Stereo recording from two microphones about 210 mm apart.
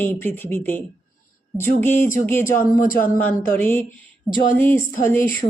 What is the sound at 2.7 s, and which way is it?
Speech, 40° left (ahead or behind).